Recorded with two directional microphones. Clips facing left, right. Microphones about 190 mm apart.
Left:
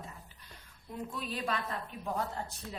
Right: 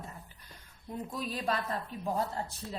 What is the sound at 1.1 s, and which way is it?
Speech, 40° right (ahead or behind).